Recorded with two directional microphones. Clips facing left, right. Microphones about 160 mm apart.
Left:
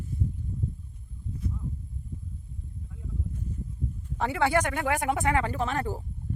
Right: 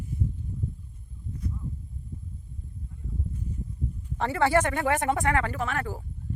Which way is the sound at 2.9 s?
90° left.